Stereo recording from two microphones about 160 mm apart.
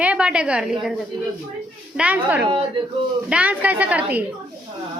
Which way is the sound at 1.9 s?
10° right (ahead or behind).